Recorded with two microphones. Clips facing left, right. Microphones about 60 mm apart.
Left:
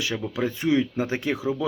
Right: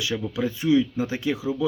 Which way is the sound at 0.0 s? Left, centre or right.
Left.